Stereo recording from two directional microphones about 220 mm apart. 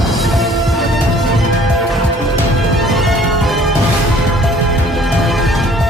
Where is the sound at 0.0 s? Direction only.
Centre (ahead or behind).